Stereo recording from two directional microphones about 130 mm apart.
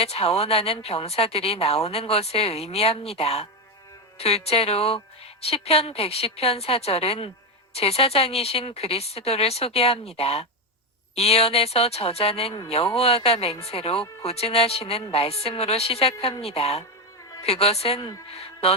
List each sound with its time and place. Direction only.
0.0 s a woman's voice: 50° left (ahead or behind)